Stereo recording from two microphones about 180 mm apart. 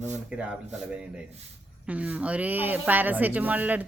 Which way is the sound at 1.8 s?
5° right (ahead or behind).